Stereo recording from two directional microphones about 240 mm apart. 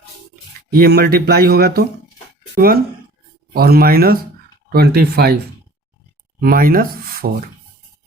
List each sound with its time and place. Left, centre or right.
0.7 s speech: right
6.4 s speech: right